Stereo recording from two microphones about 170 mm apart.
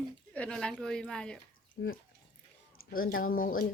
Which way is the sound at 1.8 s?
80° left.